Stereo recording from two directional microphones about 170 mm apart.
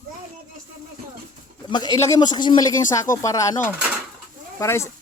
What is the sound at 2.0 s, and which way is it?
Speech, 25° left (ahead or behind).